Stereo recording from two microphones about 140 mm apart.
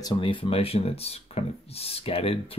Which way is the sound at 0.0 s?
30° left (ahead or behind).